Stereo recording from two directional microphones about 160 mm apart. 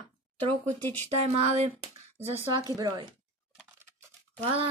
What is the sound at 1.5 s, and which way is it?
Speech, 45° right (ahead or behind).